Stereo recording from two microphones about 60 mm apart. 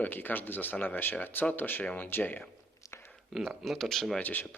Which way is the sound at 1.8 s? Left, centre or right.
Left.